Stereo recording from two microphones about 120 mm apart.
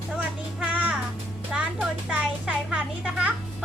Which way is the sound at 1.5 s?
10° right (ahead or behind).